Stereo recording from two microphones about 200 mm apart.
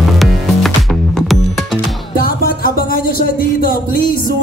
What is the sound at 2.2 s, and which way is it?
Music, 45° left (ahead or behind).